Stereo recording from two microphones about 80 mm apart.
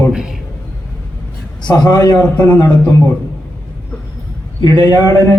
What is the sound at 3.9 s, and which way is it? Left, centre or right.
Vehicle, centre.